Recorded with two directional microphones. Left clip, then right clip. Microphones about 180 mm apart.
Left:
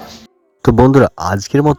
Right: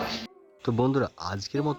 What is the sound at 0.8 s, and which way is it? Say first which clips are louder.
Speech: left 16 dB; 65° left (ahead or behind).